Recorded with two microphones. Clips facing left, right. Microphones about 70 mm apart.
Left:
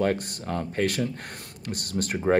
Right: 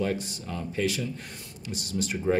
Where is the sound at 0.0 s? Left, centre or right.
Left.